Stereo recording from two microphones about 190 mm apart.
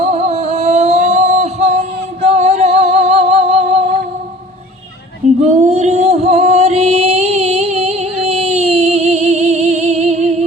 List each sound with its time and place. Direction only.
0.0 s music: 35° right (ahead or behind)
5.4 s music: 35° right (ahead or behind)